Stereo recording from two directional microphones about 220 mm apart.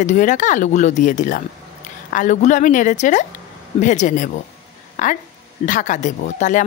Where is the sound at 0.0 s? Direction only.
35° left (ahead or behind).